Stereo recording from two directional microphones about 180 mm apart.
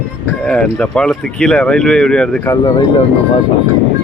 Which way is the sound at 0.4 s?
5° left (ahead or behind).